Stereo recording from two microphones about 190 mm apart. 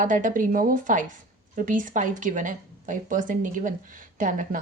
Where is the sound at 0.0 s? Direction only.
45° right (ahead or behind).